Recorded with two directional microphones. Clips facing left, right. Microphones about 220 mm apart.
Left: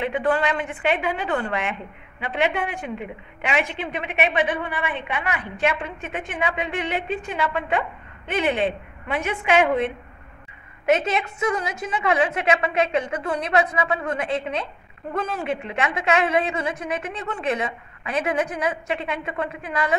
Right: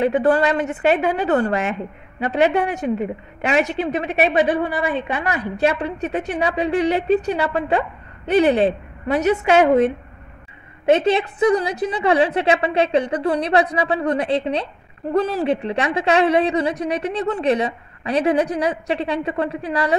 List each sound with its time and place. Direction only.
0.0 s a woman's voice: 45° right (ahead or behind)
10.9 s a woman's voice: 30° right (ahead or behind)